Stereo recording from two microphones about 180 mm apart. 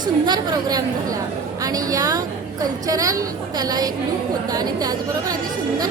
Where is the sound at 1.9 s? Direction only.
20° right (ahead or behind).